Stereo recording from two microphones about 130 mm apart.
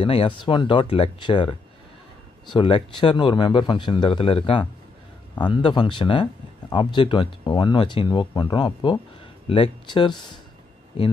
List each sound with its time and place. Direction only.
0.0 s speech: 45° left (ahead or behind)